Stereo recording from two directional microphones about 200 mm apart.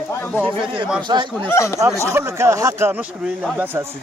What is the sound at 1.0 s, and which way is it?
Speech, 20° right (ahead or behind).